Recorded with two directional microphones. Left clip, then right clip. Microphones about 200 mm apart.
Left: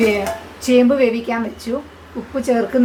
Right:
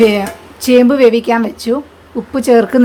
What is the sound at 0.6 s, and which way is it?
Speech, 60° right (ahead or behind).